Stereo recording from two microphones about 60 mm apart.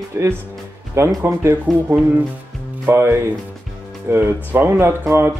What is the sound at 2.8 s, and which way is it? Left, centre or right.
Speech, right.